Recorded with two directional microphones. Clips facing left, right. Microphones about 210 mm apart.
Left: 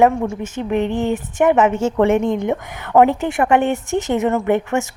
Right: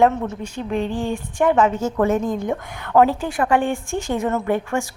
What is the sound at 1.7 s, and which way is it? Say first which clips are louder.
A woman's voice: left 4 dB; 25° left (ahead or behind).